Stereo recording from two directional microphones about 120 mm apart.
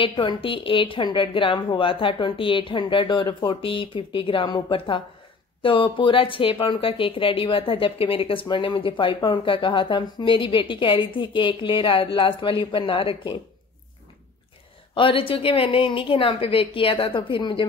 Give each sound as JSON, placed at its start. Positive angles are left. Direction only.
{"t": 0.0, "sound": "speech", "side_deg": 45}
{"t": 15.0, "sound": "speech", "side_deg": 45}